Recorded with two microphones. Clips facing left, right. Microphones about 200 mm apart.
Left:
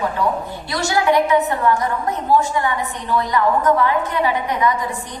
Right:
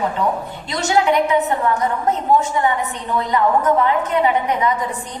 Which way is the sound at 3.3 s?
20° right (ahead or behind).